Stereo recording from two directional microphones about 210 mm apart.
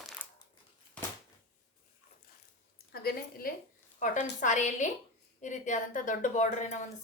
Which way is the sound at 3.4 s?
45° left (ahead or behind).